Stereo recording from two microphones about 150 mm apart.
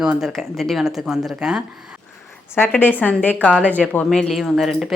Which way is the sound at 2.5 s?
15° left (ahead or behind).